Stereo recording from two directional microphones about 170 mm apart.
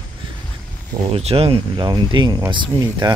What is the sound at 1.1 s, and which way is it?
Speech, 35° right (ahead or behind).